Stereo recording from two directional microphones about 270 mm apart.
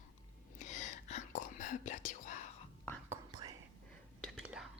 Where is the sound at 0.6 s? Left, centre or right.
Left.